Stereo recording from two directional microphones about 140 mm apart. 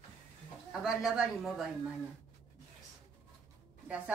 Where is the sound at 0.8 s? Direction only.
5° right (ahead or behind).